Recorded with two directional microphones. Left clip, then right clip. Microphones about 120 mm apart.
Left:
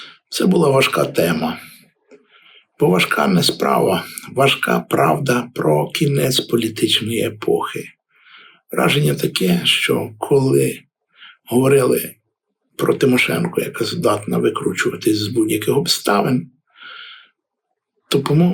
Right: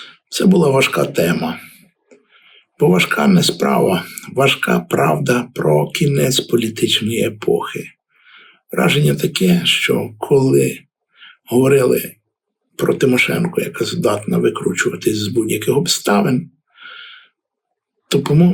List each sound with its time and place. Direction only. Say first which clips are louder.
0.0 s speech: right 2 dB; 15° left (ahead or behind)